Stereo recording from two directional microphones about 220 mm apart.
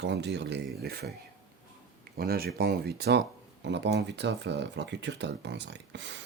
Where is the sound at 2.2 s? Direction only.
45° right (ahead or behind).